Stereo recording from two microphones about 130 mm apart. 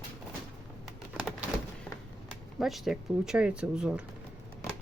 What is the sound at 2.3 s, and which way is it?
Speech, centre (ahead or behind).